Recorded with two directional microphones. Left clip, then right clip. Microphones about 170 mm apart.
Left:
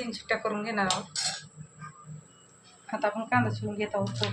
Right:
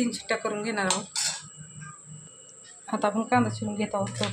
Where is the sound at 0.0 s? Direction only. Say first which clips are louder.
Right 2 dB; 90° right.